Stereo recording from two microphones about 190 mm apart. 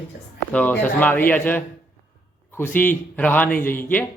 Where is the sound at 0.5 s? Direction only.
10° left (ahead or behind).